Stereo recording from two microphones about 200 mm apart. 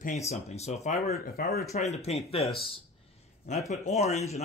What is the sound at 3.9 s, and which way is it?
Speech, 35° left (ahead or behind).